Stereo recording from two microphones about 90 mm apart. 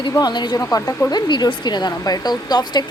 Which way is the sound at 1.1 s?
55° left (ahead or behind).